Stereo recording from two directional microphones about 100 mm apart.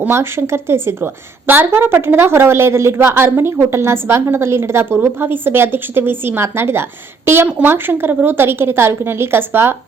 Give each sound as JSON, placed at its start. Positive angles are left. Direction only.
{"t": 0.0, "sound": "a woman's voice", "side_deg": -25}